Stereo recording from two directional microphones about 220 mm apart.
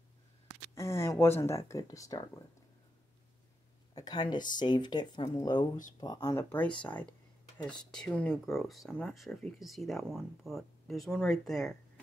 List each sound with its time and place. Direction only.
0.7 s speech: 10° left (ahead or behind)
3.9 s speech: 20° left (ahead or behind)
7.9 s speech: 5° left (ahead or behind)